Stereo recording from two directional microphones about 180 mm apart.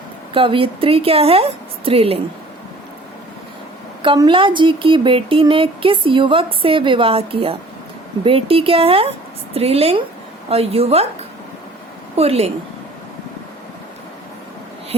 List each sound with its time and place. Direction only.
0.3 s a woman's voice: 30° right (ahead or behind)
4.0 s a woman's voice: 25° right (ahead or behind)
12.1 s a woman's voice: 35° right (ahead or behind)